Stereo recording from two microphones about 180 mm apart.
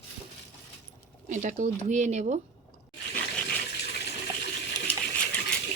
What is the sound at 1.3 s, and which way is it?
Speech, 45° right (ahead or behind).